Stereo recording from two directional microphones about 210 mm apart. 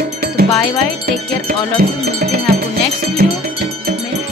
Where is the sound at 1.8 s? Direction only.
45° right (ahead or behind).